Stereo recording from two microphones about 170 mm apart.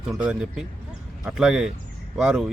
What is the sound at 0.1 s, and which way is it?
Speech, 5° right (ahead or behind).